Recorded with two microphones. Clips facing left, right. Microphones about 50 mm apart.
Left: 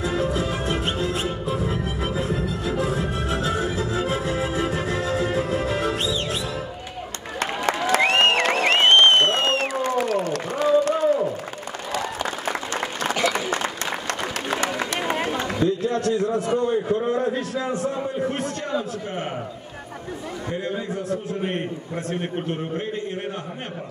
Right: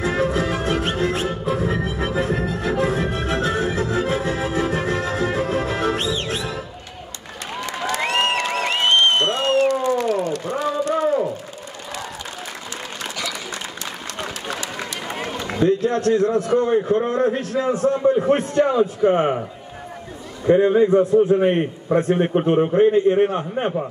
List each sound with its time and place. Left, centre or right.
0.0 s music: right
7.9 s applause: left
11.0 s a sound: right
13.0 s run: left
15.5 s a sound: right
16.5 s a man's voice: right
20.4 s a man's voice: right